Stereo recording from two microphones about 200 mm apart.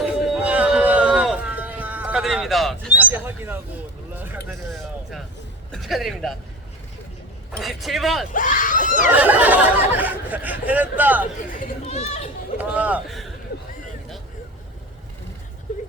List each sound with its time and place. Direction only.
0.0 s a sound: 5° right (ahead or behind)
3.1 s speech: 10° right (ahead or behind)
4.4 s speech: centre (ahead or behind)
7.6 s speech: centre (ahead or behind)
8.3 s speech: 40° left (ahead or behind)
9.1 s speech: 10° right (ahead or behind)
11.8 s chatter: 30° left (ahead or behind)
12.5 s a man's voice: 5° right (ahead or behind)